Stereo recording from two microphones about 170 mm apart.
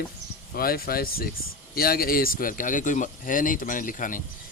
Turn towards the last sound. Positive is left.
turn(degrees=50)  # may be behind; listen again after turning